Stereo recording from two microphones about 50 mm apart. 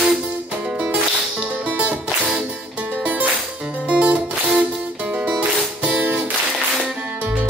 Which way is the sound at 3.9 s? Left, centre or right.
Right.